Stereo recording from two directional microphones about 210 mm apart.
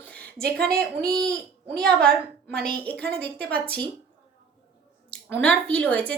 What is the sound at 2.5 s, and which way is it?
A child's voice, 5° left (ahead or behind).